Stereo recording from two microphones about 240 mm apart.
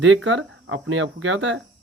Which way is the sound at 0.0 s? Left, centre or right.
Right.